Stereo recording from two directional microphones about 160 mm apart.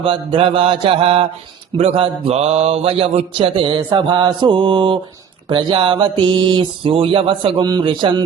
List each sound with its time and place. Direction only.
0.0 s mantra: 35° right (ahead or behind)